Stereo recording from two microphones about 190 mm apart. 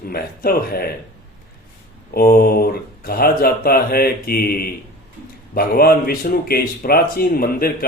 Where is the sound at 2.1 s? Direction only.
50° left (ahead or behind).